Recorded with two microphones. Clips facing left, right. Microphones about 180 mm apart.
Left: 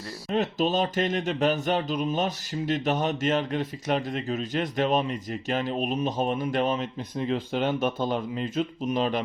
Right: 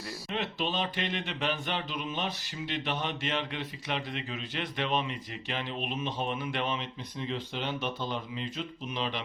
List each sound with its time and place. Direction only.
0.3 s speech: 40° left (ahead or behind)